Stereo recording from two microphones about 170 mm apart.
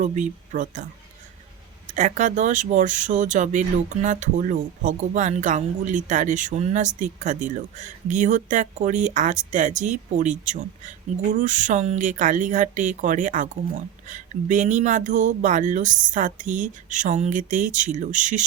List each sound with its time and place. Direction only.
0.0 s speech: 50° right (ahead or behind)
1.9 s speech: 45° right (ahead or behind)